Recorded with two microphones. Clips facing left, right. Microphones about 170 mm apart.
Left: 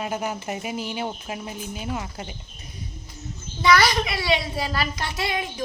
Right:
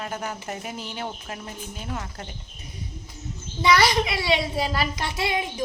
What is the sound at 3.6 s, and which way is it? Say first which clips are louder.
A child's voice: even; 25° right (ahead or behind).